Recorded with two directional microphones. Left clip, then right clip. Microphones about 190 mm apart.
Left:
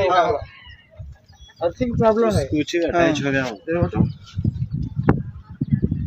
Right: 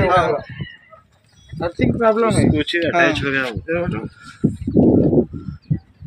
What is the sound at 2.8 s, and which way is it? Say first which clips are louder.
Speech: right 2 dB; 35° left (ahead or behind).